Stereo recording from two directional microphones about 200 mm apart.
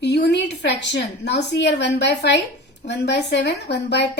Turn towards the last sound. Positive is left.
turn(degrees=55)  # may be behind; listen again after turning